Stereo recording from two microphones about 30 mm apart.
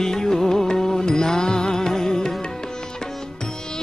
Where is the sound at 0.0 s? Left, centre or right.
Centre.